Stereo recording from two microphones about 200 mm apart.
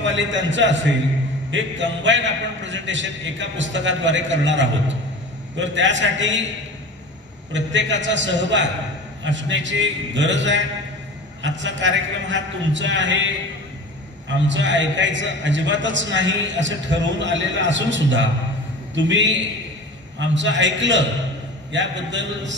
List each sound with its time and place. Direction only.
0.0 s a man's voice: 65° right (ahead or behind)
7.5 s a man's voice: 65° right (ahead or behind)
14.5 s a man's voice: 65° right (ahead or behind)